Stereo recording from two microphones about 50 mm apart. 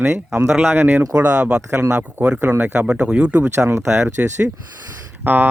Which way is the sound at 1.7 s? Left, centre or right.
Right.